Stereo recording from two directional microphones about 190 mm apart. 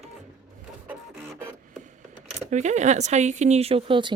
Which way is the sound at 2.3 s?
40° right (ahead or behind).